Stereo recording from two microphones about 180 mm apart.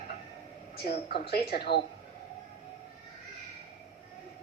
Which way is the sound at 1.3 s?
60° left (ahead or behind).